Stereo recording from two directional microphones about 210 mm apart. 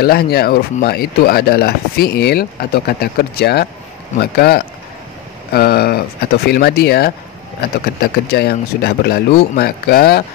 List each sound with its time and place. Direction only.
0.0 s speech: 45° left (ahead or behind)